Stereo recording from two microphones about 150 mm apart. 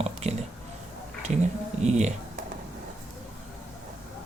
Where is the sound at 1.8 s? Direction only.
50° right (ahead or behind).